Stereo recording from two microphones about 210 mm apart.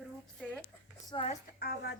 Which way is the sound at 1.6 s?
45° left (ahead or behind).